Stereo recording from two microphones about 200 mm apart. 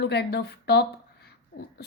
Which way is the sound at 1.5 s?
50° left (ahead or behind).